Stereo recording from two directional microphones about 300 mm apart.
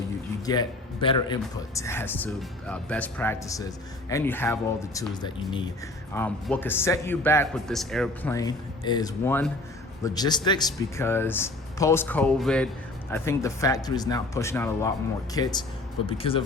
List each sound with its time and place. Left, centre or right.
0.4 s a man's voice: centre